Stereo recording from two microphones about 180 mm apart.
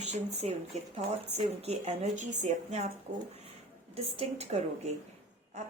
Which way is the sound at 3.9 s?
35° right (ahead or behind).